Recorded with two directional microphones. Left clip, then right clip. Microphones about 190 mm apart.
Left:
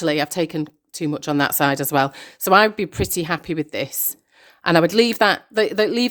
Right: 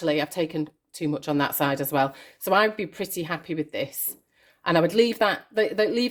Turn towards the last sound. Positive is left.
turn(degrees=45)  # may be behind; listen again after turning